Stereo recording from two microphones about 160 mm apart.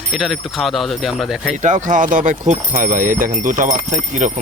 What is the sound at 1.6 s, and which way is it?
Speech, 50° right (ahead or behind).